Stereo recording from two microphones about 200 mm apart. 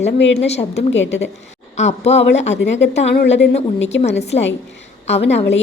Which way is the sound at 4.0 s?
35° left (ahead or behind).